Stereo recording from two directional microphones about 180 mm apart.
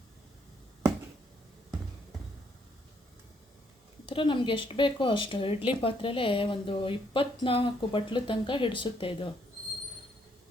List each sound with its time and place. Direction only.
4.0 s speech: 25° left (ahead or behind)